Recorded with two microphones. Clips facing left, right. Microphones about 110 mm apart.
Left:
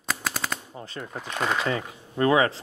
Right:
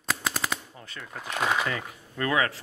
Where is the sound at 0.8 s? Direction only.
30° left (ahead or behind).